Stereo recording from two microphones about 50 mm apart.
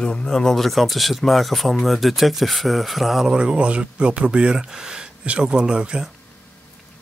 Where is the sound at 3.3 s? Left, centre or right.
Right.